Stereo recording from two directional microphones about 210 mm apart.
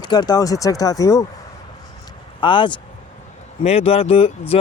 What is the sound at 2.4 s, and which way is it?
Speech, 25° left (ahead or behind).